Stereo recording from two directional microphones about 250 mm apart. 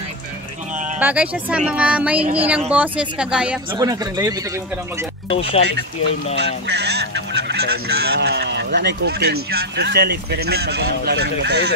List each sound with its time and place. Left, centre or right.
0.9 s speech: centre
3.7 s speech: centre
5.3 s speech: left
5.6 s speech: right
6.3 s goose: right
8.0 s speech: right